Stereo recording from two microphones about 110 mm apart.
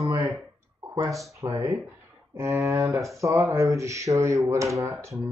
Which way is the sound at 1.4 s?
25° right (ahead or behind).